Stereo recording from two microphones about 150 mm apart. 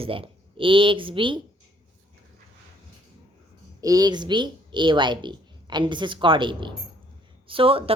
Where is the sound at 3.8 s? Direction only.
25° right (ahead or behind).